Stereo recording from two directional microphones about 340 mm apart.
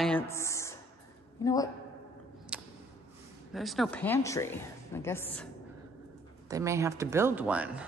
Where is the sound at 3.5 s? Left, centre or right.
Centre.